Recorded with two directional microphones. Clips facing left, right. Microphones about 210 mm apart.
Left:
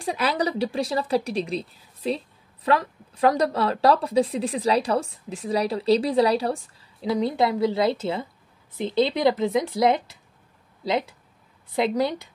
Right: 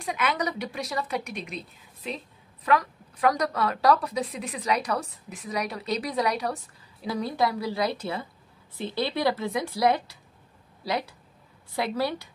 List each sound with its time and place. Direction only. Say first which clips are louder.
0.0 s a woman's voice: left 4 dB; 35° left (ahead or behind)